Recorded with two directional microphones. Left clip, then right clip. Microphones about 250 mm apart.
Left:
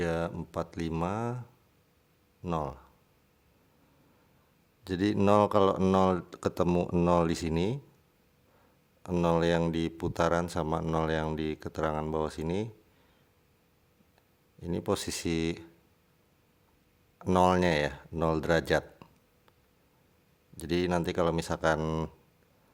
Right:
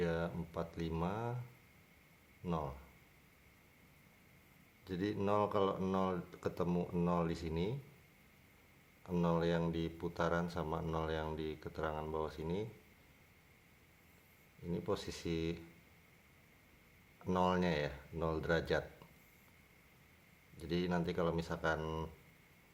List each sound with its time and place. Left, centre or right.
0.0 s speech: left
2.4 s speech: left
4.8 s speech: left
9.0 s speech: left
14.6 s speech: left
17.2 s speech: left
20.6 s speech: left